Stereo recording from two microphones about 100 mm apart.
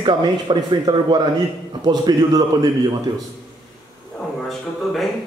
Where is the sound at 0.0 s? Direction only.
45° right (ahead or behind).